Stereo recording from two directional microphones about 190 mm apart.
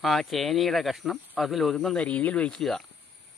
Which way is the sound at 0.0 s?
Centre (ahead or behind).